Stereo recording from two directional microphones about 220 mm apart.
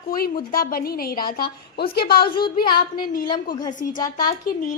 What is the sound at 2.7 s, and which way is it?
Speech, 40° left (ahead or behind).